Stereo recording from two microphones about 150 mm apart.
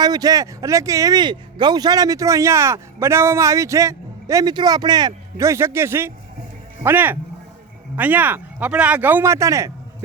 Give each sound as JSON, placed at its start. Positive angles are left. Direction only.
{"t": 0.0, "sound": "speech", "side_deg": -25}